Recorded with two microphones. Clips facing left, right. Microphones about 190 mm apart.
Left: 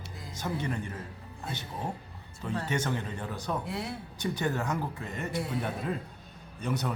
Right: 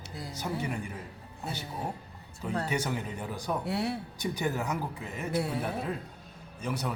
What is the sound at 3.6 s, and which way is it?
Speech, 65° right (ahead or behind).